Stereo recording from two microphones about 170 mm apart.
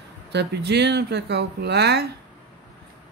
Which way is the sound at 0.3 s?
85° right.